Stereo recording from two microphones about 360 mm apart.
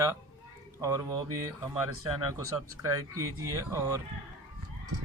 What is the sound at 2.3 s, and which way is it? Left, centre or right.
Speech, centre.